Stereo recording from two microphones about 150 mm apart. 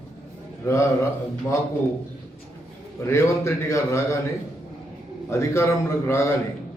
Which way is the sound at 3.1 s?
20° left (ahead or behind).